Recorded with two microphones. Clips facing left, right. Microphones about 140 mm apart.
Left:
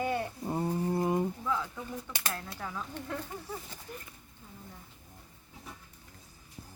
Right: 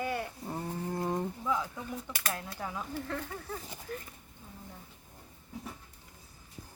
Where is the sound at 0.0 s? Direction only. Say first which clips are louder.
Left 3 dB; 20° left (ahead or behind).